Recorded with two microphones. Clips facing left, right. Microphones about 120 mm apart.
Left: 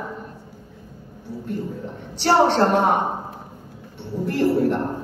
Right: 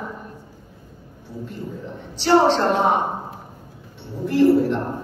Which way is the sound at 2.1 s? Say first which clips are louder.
Right 1 dB; 55° left (ahead or behind).